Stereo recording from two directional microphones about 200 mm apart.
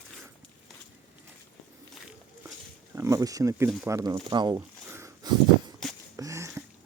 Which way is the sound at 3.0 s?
15° right (ahead or behind).